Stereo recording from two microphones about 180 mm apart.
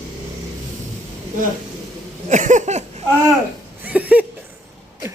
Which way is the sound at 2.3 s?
45° right (ahead or behind).